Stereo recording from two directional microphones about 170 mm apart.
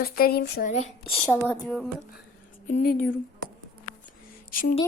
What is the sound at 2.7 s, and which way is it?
Speech, 50° left (ahead or behind).